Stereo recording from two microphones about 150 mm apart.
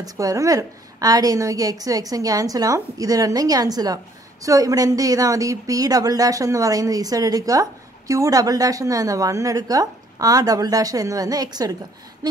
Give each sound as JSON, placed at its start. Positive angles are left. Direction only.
{"t": 0.0, "sound": "a woman's voice", "side_deg": -25}